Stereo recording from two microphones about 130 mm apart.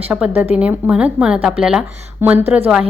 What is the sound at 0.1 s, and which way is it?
A woman's voice, 10° right (ahead or behind).